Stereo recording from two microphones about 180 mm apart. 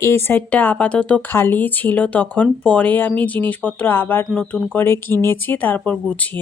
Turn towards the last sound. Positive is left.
turn(degrees=10)  # may be behind; listen again after turning